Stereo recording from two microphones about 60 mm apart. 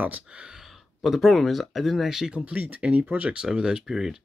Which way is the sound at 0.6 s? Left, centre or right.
Centre.